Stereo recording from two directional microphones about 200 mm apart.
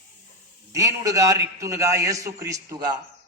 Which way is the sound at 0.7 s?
15° right (ahead or behind).